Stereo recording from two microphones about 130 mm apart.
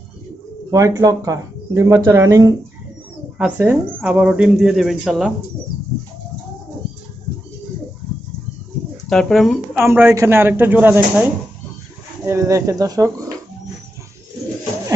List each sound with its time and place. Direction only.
0.7 s speech: 25° right (ahead or behind)
3.3 s speech: 10° right (ahead or behind)
9.1 s a woman's voice: centre (ahead or behind)
9.9 s speech: 20° right (ahead or behind)
12.3 s speech: 25° right (ahead or behind)